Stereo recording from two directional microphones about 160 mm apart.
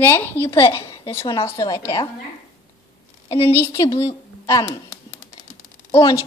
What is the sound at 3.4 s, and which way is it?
Speech, 15° left (ahead or behind).